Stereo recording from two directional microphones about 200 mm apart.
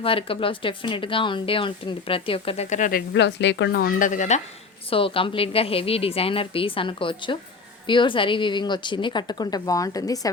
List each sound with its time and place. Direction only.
0.0 s speech: 25° left (ahead or behind)
3.1 s speech: 60° left (ahead or behind); by 4.4 s 40° left (ahead or behind)
4.9 s speech: 25° left (ahead or behind)